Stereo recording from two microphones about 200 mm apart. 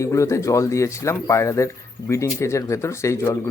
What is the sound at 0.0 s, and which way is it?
Speech, 15° left (ahead or behind).